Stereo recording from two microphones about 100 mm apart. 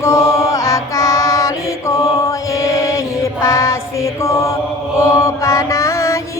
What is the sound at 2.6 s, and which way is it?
Chant, 35° left (ahead or behind).